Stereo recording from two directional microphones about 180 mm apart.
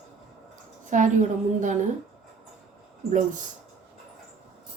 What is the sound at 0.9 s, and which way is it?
Speech, 45° right (ahead or behind).